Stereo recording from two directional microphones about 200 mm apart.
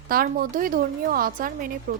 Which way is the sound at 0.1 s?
45° right (ahead or behind).